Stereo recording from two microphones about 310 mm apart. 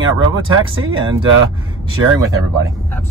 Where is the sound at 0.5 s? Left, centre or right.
Right.